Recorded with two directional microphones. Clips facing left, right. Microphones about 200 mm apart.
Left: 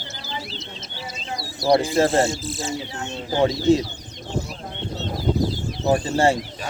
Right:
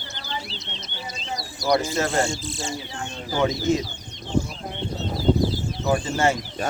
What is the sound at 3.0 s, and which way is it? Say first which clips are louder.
Speech: left 3 dB; 30° left (ahead or behind).